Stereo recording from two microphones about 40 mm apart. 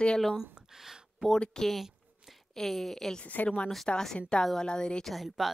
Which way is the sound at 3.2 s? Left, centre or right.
Left.